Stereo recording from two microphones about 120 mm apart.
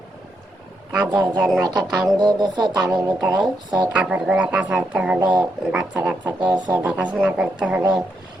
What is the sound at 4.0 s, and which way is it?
Speech, 5° right (ahead or behind).